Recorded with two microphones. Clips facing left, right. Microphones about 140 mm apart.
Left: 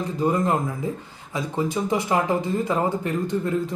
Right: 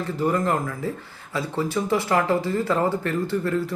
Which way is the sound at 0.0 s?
20° left (ahead or behind).